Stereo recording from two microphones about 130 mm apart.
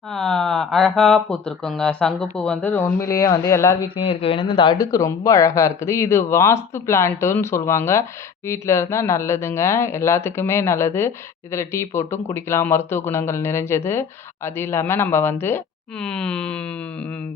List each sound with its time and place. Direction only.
0.1 s a man's voice: 5° left (ahead or behind)
3.1 s speech: 25° left (ahead or behind)
3.9 s a man's voice: 50° left (ahead or behind); by 15.6 s 20° left (ahead or behind)
16.0 s wail: 5° left (ahead or behind)